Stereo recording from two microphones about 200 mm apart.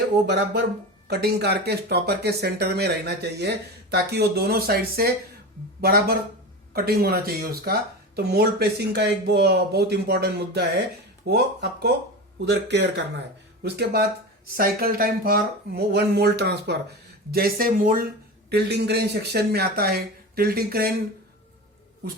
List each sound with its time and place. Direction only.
0.3 s speech: 55° right (ahead or behind)